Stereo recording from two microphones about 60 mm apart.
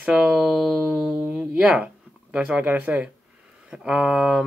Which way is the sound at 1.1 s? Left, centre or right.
Centre.